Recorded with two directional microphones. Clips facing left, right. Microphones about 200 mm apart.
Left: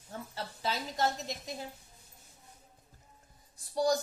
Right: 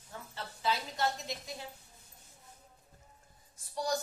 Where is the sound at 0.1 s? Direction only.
35° left (ahead or behind).